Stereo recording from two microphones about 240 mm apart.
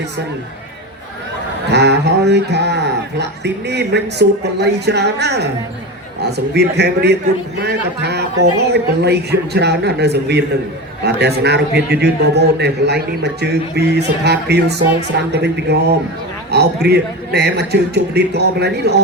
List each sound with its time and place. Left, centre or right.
1.7 s a man's voice: right